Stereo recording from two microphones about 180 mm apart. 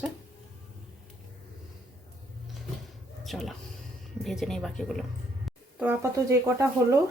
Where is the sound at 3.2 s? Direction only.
Centre (ahead or behind).